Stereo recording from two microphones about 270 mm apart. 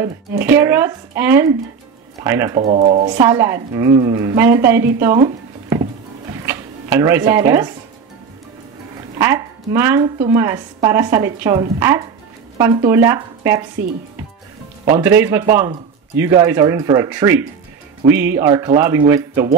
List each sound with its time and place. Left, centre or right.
0.0 s a woman's voice: centre
2.6 s speech: right
3.2 s a woman's voice: centre
6.4 s a sound: centre
9.2 s a woman's voice: centre
15.0 s a woman's voice: centre